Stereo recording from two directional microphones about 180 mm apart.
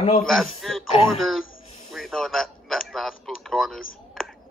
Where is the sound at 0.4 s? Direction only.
Centre (ahead or behind).